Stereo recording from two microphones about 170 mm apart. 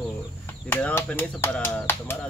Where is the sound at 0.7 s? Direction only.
10° left (ahead or behind).